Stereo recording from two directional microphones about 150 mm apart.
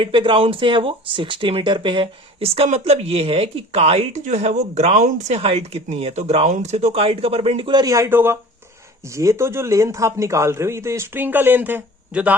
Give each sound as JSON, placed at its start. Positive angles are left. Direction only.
{"t": 0.0, "sound": "a man's voice", "side_deg": -35}